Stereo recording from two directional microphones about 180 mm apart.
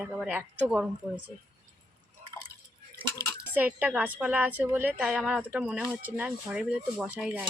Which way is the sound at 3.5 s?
10° right (ahead or behind).